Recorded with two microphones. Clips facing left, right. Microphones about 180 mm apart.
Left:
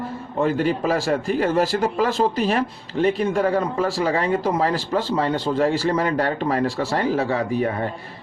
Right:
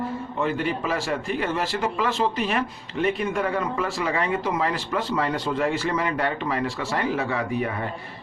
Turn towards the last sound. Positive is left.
turn(degrees=35)  # may be behind; listen again after turning